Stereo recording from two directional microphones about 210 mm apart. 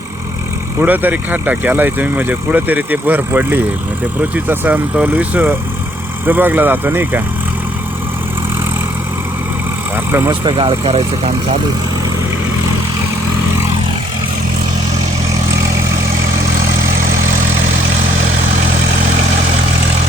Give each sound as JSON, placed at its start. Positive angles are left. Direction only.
{"t": 0.8, "sound": "speech", "side_deg": -10}
{"t": 9.9, "sound": "speech", "side_deg": -10}